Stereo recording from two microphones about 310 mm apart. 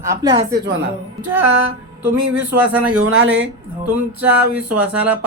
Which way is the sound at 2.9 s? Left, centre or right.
Right.